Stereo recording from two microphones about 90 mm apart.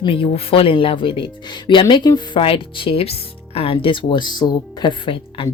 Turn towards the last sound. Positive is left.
turn(degrees=80)